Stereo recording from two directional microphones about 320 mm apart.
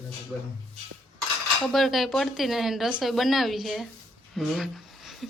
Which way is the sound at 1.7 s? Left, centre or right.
Centre.